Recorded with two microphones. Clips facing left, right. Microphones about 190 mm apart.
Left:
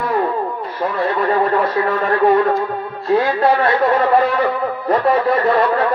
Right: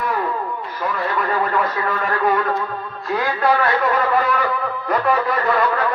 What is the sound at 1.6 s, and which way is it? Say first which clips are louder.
Speech: left 5 dB; 30° left (ahead or behind).